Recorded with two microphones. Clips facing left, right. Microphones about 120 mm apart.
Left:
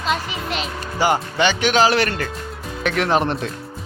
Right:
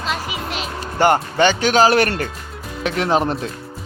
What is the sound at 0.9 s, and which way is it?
Speech, 50° right (ahead or behind).